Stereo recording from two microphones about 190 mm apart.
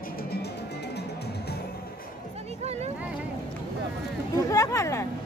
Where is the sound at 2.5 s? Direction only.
35° right (ahead or behind).